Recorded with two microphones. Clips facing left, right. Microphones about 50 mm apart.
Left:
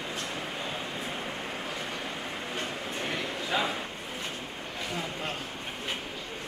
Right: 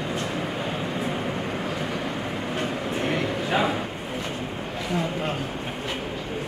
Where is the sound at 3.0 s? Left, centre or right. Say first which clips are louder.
Right 7 dB; right.